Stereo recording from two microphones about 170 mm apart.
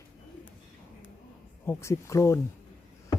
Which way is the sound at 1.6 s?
15° left (ahead or behind).